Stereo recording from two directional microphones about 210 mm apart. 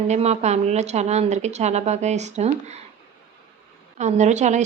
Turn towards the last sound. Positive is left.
turn(degrees=-35)  # may be behind; listen again after turning